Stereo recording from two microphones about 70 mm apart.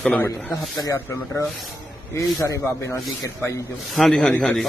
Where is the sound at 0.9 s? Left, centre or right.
Left.